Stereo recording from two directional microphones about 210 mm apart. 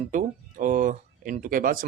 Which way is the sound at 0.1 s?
35° right (ahead or behind).